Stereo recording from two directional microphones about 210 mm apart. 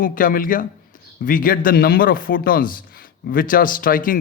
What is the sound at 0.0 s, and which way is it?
A man's voice, 40° left (ahead or behind).